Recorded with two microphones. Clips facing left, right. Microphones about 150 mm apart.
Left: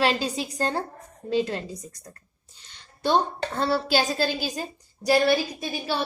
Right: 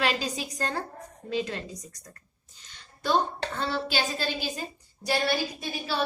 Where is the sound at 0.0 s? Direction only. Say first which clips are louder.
Left 4 dB; 30° left (ahead or behind).